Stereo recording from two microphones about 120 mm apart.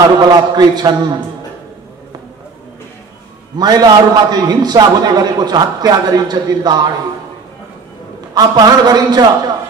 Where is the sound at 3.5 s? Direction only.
35° right (ahead or behind).